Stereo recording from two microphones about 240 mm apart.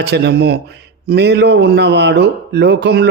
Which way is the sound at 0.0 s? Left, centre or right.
Right.